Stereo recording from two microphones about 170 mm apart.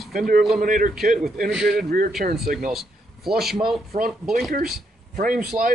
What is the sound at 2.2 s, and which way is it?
Speech, 50° right (ahead or behind).